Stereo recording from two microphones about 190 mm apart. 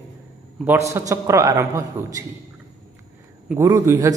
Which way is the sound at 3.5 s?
15° right (ahead or behind).